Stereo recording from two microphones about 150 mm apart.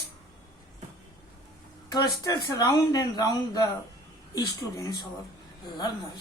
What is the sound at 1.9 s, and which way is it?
Speech, 25° left (ahead or behind).